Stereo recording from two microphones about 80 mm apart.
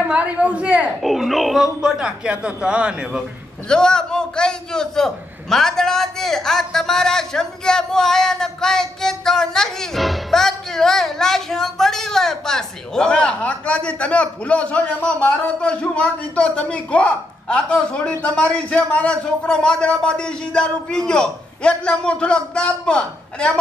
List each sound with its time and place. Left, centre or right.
0.0 s speech: centre
1.0 s speech: centre
3.6 s a man's voice: centre